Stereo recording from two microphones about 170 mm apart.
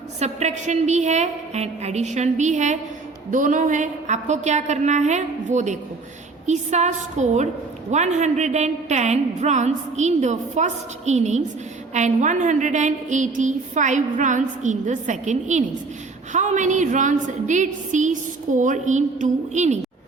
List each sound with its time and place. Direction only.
0.2 s a woman's voice: 40° right (ahead or behind)